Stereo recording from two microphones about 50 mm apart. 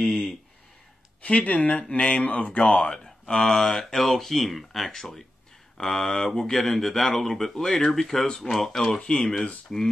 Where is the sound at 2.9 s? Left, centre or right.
Centre.